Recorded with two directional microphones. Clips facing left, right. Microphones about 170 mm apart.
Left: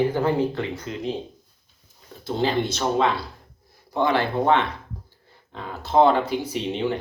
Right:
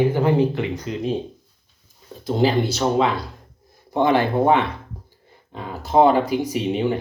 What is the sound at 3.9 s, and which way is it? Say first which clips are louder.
Speech: right 4 dB; 20° right (ahead or behind).